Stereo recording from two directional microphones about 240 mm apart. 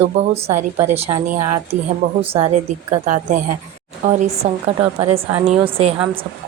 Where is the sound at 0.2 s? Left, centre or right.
Right.